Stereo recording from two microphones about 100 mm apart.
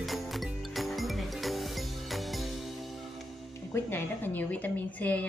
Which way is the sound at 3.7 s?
20° left (ahead or behind).